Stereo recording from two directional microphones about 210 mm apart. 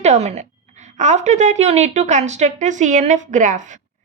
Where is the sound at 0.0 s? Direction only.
35° right (ahead or behind).